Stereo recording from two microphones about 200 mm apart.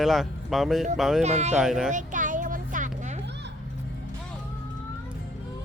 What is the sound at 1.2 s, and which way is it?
Speech, 35° right (ahead or behind).